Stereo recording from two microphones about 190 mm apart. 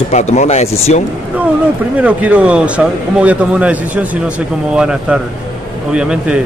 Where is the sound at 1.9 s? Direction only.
5° right (ahead or behind).